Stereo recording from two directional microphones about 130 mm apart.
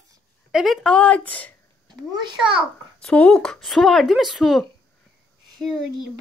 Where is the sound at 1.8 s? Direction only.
35° right (ahead or behind).